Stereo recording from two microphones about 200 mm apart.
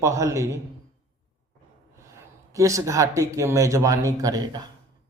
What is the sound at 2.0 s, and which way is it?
A man's voice, 15° right (ahead or behind).